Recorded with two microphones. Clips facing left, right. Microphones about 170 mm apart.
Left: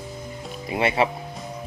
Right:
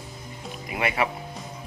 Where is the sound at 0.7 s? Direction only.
30° left (ahead or behind).